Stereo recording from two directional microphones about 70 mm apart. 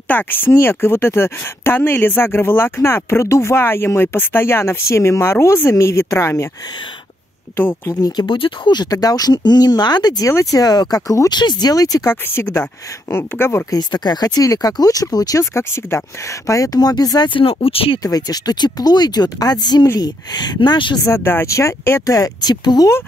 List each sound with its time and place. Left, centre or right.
0.1 s speech: left
7.8 s speech: left
8.9 s speech: left
10.2 s speech: left
11.2 s speech: left
12.1 s speech: left
13.7 s speech: left
15.5 s speech: left
16.4 s speech: left
21.0 s speech: left
22.0 s speech: left